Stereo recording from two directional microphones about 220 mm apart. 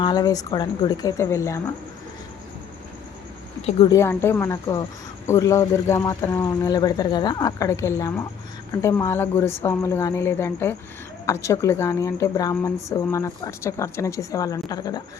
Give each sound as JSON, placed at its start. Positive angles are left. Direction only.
{"t": 0.0, "sound": "speech", "side_deg": 15}
{"t": 3.8, "sound": "speech", "side_deg": 10}